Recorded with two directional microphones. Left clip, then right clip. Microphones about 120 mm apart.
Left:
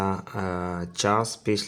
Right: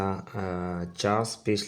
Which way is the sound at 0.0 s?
30° left (ahead or behind).